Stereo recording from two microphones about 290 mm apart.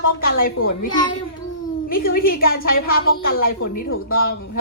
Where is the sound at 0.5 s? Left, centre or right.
Left.